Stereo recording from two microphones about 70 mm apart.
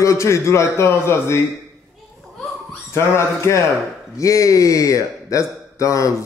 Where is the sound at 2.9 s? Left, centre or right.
Left.